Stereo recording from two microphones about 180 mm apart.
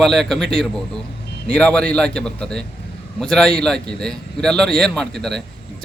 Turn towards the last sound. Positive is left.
turn(degrees=5)  # may be behind; listen again after turning